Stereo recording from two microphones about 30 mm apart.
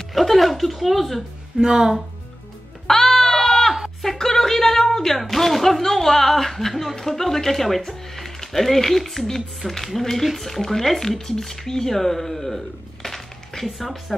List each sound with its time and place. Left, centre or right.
0.1 s a woman's voice: centre
1.6 s speech: centre
2.9 s music: centre
3.4 s a sound: centre
5.2 s speech: centre